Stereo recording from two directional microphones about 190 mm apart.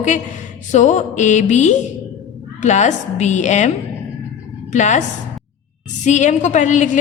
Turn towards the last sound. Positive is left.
turn(degrees=40)  # may be behind; listen again after turning